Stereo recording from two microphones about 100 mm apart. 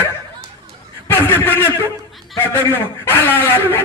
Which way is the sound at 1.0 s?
25° left (ahead or behind).